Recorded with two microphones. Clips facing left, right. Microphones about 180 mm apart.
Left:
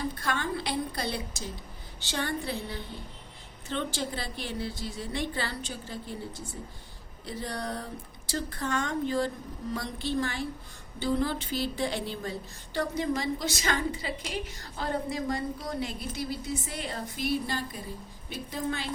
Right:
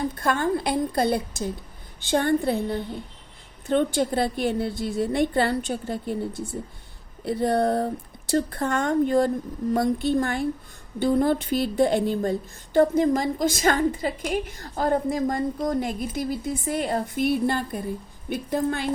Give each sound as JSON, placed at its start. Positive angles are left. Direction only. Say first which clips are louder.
{"t": 0.2, "sound": "a woman's voice", "louder": "right 8 dB", "side_deg": -50}